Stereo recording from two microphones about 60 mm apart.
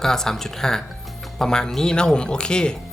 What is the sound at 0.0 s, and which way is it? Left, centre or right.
Speech, centre.